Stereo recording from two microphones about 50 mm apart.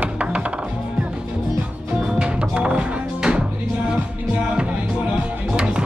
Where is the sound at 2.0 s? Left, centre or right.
Centre.